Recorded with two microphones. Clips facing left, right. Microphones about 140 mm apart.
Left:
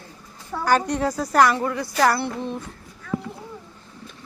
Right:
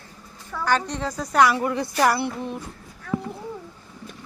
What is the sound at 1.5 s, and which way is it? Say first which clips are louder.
Speech: even; 15° right (ahead or behind).